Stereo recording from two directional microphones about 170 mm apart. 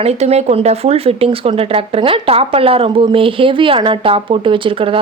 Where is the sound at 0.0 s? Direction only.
40° right (ahead or behind).